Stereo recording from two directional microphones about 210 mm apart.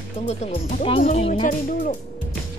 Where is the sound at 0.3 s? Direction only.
30° left (ahead or behind).